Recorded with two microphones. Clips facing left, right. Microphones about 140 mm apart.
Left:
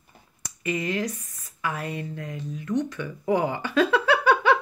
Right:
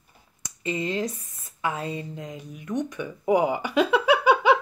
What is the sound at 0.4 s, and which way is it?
Speech, 25° right (ahead or behind).